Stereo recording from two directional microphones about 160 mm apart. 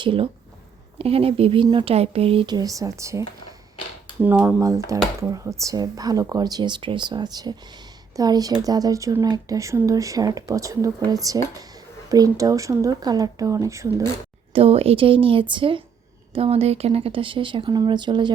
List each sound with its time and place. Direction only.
0.0 s speech: 35° right (ahead or behind)
14.5 s speech: 35° right (ahead or behind)